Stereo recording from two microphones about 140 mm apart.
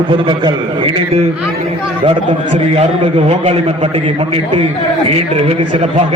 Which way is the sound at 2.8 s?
45° right (ahead or behind).